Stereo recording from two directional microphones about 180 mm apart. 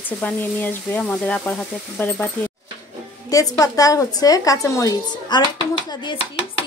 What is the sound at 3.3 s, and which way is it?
A woman's voice, 20° left (ahead or behind).